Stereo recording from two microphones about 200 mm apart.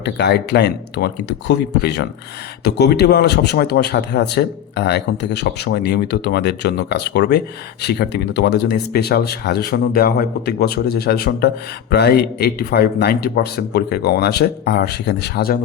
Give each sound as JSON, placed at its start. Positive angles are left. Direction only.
{"t": 0.0, "sound": "speech", "side_deg": 55}